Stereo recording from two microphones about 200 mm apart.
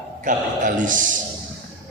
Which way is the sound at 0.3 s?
40° right (ahead or behind).